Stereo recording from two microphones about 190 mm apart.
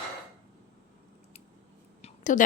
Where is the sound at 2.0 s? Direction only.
40° left (ahead or behind).